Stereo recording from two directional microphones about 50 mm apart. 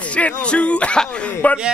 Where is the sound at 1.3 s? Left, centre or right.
Left.